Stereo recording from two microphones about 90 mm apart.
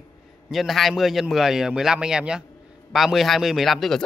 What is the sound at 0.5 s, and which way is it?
A man's voice, centre (ahead or behind).